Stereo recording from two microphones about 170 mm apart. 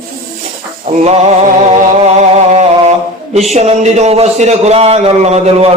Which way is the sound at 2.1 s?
40° right (ahead or behind).